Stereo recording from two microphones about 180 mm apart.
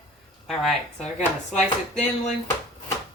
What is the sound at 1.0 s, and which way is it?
Speech, 40° left (ahead or behind).